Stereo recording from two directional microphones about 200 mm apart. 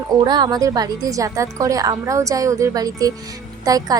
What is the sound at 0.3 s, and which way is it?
A woman's voice, 20° right (ahead or behind).